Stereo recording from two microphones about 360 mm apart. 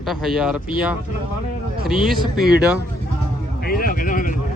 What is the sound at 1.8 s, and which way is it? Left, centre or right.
Speech, centre.